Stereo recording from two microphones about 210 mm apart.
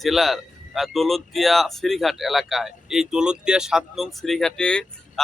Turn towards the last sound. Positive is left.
turn(degrees=5)  # may be behind; listen again after turning